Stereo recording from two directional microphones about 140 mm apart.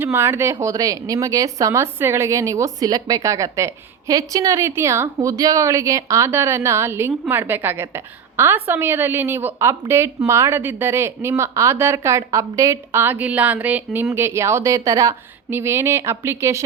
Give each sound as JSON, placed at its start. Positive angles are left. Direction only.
{"t": 0.0, "sound": "speech", "side_deg": -15}